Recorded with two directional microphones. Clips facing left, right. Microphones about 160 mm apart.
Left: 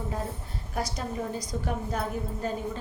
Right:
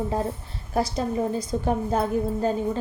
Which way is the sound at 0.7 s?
30° right (ahead or behind).